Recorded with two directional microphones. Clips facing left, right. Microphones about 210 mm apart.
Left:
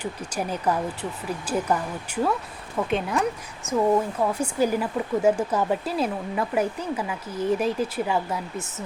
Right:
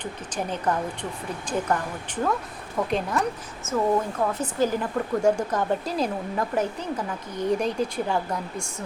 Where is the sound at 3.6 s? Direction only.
15° left (ahead or behind).